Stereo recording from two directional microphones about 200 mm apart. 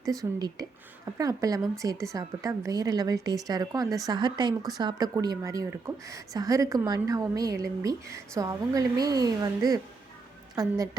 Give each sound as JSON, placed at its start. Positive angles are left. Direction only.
{"t": 0.0, "sound": "speech", "side_deg": -15}